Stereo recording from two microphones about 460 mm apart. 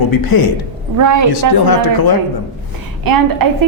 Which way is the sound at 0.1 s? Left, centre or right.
Left.